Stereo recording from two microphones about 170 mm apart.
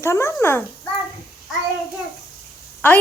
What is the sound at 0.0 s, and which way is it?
Speech, 15° left (ahead or behind).